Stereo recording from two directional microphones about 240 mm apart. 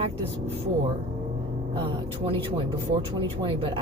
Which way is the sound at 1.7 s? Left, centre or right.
Right.